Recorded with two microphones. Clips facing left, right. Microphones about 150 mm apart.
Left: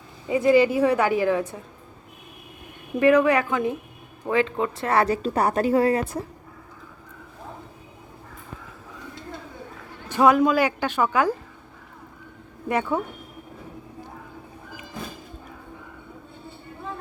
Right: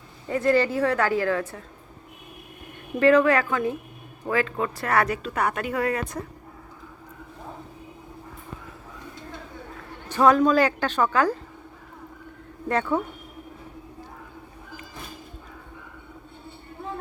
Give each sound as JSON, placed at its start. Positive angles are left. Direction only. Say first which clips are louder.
{"t": 0.3, "sound": "a woman's voice", "louder": "left 4 dB", "side_deg": 10}
{"t": 3.0, "sound": "a woman's voice", "louder": "even", "side_deg": 15}
{"t": 10.1, "sound": "a woman's voice", "louder": "even", "side_deg": 10}
{"t": 12.6, "sound": "a woman's voice", "louder": "even", "side_deg": 10}